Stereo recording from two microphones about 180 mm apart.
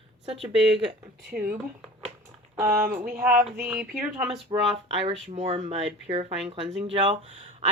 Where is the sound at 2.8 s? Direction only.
50° right (ahead or behind).